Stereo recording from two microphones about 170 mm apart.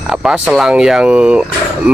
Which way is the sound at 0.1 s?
Centre (ahead or behind).